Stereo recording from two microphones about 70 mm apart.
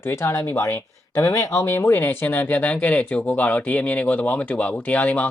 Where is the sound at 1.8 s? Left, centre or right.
Left.